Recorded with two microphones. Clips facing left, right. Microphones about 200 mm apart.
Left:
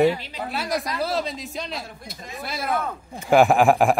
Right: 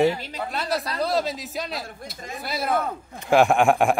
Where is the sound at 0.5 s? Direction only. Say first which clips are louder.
Left 1 dB; 10° left (ahead or behind).